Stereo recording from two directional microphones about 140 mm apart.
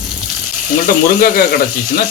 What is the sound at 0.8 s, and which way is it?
Speech, 90° left.